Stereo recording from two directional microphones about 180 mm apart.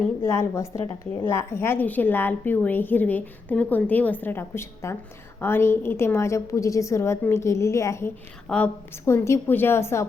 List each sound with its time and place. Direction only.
0.2 s a woman's voice: 15° left (ahead or behind)